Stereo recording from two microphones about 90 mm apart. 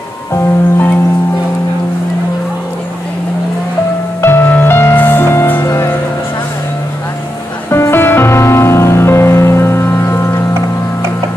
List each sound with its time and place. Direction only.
0.3 s music: 30° left (ahead or behind)
4.2 s music: 25° left (ahead or behind)
7.7 s music: 25° left (ahead or behind)